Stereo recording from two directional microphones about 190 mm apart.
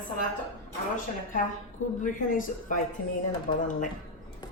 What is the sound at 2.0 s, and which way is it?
A woman's voice, 45° left (ahead or behind).